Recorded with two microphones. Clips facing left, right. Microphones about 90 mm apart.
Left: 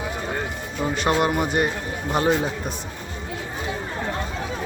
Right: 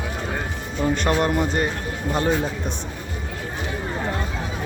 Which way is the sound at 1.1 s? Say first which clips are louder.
Even; 10° left (ahead or behind).